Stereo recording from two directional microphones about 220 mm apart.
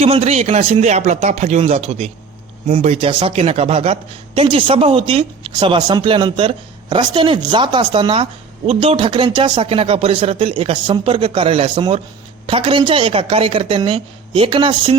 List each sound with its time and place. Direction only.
0.0 s speech: 30° right (ahead or behind)